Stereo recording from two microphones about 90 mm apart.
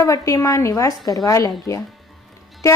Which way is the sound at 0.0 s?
35° left (ahead or behind).